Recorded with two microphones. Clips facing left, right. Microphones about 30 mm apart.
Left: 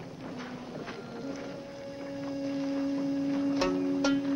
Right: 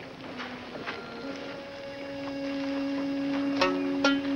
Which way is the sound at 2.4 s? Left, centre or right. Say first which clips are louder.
Even; right.